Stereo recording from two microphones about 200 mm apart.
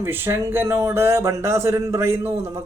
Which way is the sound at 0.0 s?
10° right (ahead or behind).